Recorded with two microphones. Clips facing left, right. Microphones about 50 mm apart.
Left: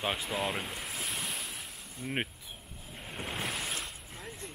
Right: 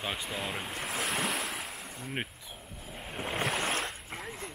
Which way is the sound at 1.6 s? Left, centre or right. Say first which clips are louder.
Right 5 dB; right.